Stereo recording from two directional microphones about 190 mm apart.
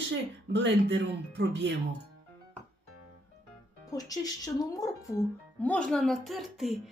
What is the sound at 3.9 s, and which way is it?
Speech, 20° left (ahead or behind).